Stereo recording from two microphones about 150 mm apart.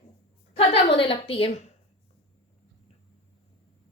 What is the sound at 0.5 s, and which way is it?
A woman's voice, 40° left (ahead or behind).